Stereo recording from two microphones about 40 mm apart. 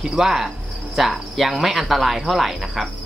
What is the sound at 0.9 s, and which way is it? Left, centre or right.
Speech, centre.